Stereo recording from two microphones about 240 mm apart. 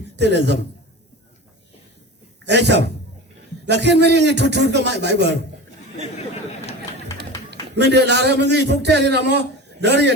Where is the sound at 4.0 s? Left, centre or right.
Right.